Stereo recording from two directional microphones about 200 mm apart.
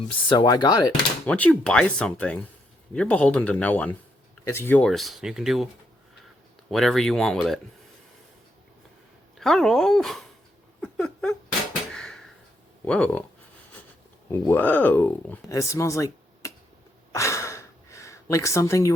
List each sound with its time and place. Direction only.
0.3 s speech: 20° left (ahead or behind)
1.3 s speech: 5° left (ahead or behind)
6.7 s speech: centre (ahead or behind)
9.4 s speech: centre (ahead or behind)
10.8 s a sound: 5° left (ahead or behind)
12.8 s speech: 5° left (ahead or behind)
14.3 s speech: 10° left (ahead or behind)
17.1 s gasp: 15° left (ahead or behind)